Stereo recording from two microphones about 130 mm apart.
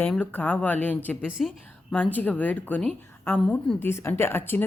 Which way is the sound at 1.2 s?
5° right (ahead or behind).